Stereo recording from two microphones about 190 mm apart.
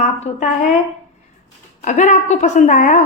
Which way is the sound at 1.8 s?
40° left (ahead or behind).